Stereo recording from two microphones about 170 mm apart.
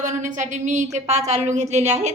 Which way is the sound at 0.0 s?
45° right (ahead or behind).